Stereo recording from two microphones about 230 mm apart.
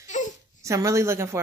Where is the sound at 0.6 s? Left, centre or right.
Centre.